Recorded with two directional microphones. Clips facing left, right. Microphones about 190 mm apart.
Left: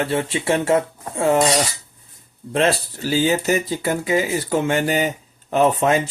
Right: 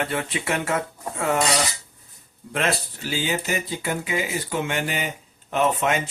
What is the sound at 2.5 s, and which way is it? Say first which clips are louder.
Speech: left 6 dB; 30° left (ahead or behind).